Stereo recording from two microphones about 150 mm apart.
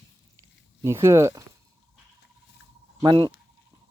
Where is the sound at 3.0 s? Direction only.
35° right (ahead or behind).